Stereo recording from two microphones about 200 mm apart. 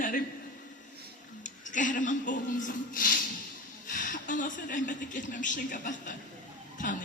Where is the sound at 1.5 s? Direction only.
40° left (ahead or behind).